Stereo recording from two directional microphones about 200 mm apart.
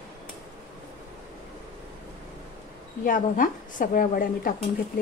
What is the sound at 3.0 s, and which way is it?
Speech, 45° left (ahead or behind).